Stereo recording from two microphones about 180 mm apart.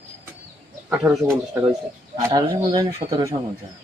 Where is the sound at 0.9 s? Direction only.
10° right (ahead or behind).